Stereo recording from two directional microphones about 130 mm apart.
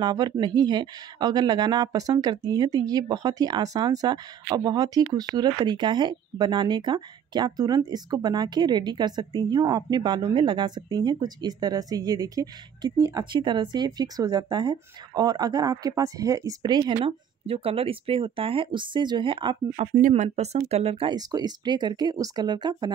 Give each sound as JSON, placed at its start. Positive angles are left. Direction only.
{"t": 0.0, "sound": "speech", "side_deg": -30}
{"t": 20.0, "sound": "speech", "side_deg": -70}
{"t": 21.1, "sound": "speech", "side_deg": -30}